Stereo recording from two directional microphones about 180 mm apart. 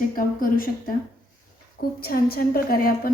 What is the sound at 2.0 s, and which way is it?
A woman's voice, 55° left (ahead or behind).